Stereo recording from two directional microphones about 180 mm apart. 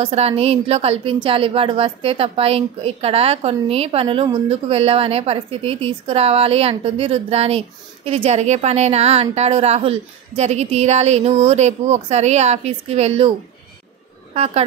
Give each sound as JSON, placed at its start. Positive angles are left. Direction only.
{"t": 0.0, "sound": "a woman's voice", "side_deg": -35}
{"t": 14.3, "sound": "speech", "side_deg": -35}